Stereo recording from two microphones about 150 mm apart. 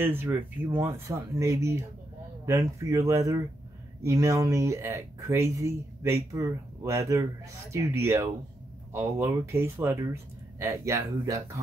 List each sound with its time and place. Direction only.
0.0 s speech: 15° right (ahead or behind)